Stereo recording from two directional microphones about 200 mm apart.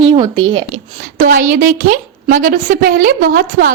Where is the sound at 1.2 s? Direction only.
40° right (ahead or behind).